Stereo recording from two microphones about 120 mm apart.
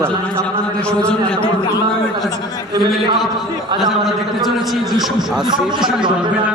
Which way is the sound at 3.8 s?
Centre (ahead or behind).